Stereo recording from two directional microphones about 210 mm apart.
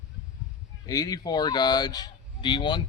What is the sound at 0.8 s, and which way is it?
Speech, 15° left (ahead or behind).